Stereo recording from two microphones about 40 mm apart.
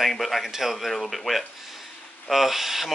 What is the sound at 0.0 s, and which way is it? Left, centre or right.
Speech, centre.